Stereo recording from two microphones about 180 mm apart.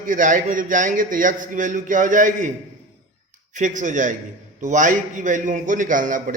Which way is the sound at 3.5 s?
45° right (ahead or behind).